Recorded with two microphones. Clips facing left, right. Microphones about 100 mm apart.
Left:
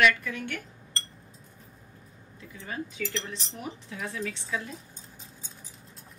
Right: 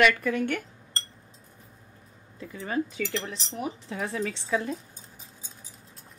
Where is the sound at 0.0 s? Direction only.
45° right (ahead or behind).